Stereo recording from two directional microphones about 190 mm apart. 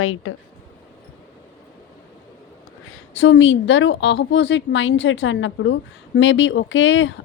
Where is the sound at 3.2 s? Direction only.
80° left.